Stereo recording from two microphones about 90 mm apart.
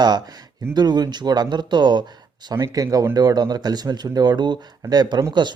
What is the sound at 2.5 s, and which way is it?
Speech, 40° right (ahead or behind).